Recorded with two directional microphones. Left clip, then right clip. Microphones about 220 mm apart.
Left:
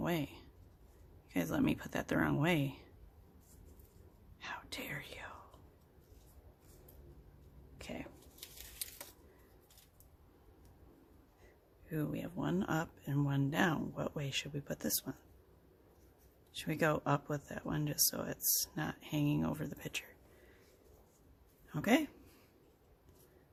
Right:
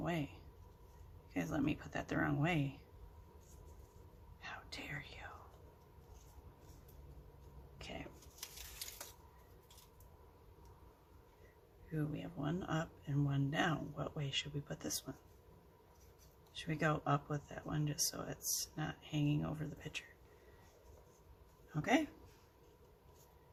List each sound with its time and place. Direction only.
0.0 s speech: 50° left (ahead or behind)
1.3 s speech: 45° left (ahead or behind)
4.4 s whispering: 45° left (ahead or behind)
7.8 s whispering: 45° left (ahead or behind)
11.9 s speech: 45° left (ahead or behind)
16.6 s speech: 45° left (ahead or behind)
21.8 s speech: 45° left (ahead or behind)